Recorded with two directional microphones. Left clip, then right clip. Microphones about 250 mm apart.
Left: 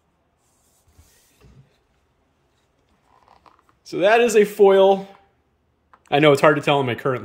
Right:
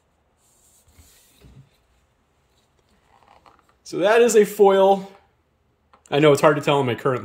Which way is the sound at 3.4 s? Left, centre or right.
Centre.